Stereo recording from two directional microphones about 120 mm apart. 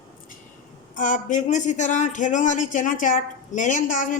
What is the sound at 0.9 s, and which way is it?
Speech, 90° left.